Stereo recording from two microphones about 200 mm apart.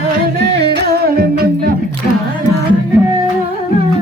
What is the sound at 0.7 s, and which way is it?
Music, 55° right (ahead or behind).